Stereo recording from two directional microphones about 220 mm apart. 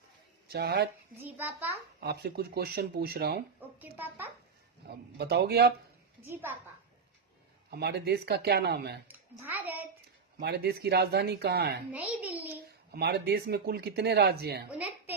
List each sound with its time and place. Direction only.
0.5 s speech: 50° right (ahead or behind)
1.4 s a child's voice: 10° right (ahead or behind)
2.0 s speech: 45° right (ahead or behind)
3.8 s a child's voice: 10° right (ahead or behind)
5.1 s speech: 45° right (ahead or behind)
6.2 s a child's voice: 10° right (ahead or behind)
7.7 s speech: 50° right (ahead or behind)
9.0 s a child's voice: 10° right (ahead or behind)
10.4 s speech: 50° right (ahead or behind)
11.9 s a child's voice: 5° right (ahead or behind)
12.9 s speech: 50° right (ahead or behind)
14.7 s a woman's voice: 5° right (ahead or behind)